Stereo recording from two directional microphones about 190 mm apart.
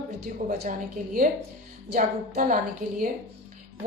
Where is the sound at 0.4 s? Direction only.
45° right (ahead or behind).